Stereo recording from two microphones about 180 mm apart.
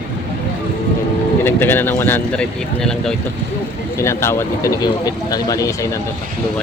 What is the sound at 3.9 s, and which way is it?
Speech, 15° left (ahead or behind).